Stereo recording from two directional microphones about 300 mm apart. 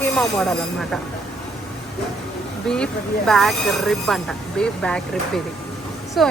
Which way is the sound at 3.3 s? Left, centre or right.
Centre.